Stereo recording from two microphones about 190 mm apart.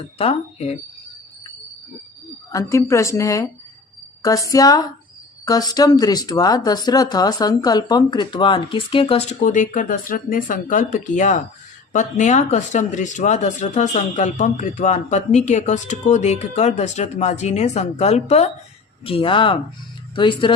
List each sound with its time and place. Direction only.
0.2 s speech: 35° left (ahead or behind)
2.5 s a woman's voice: 15° left (ahead or behind)